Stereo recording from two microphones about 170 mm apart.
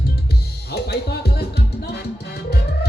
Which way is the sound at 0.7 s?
70° left (ahead or behind).